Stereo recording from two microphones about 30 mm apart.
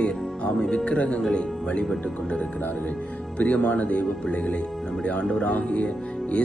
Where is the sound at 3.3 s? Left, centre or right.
Left.